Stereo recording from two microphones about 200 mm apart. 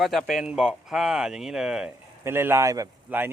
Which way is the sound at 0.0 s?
Centre (ahead or behind).